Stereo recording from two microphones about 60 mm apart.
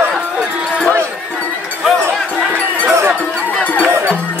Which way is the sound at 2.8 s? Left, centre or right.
Right.